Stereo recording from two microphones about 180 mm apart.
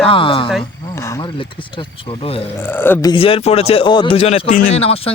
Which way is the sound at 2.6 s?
10° left (ahead or behind).